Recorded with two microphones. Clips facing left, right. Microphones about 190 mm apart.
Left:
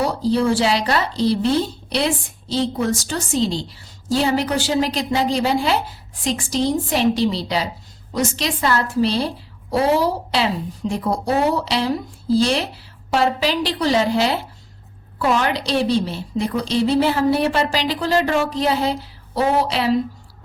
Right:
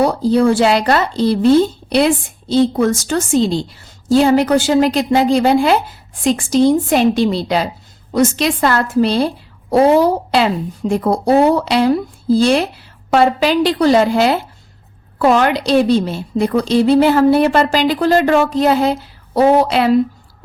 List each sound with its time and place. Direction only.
0.0 s a woman's voice: 55° right (ahead or behind)
2.7 s a woman's voice: 50° right (ahead or behind)
13.1 s a woman's voice: 55° right (ahead or behind)